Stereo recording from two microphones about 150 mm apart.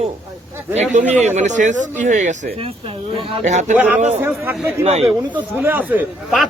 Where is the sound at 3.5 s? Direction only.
50° right (ahead or behind).